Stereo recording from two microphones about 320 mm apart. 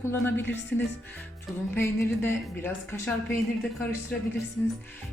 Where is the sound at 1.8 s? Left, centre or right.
Centre.